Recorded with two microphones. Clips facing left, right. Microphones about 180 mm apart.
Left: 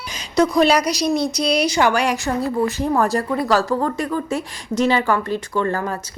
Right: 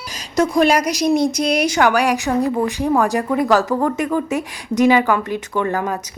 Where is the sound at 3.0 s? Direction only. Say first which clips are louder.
Right 2 dB; 15° right (ahead or behind).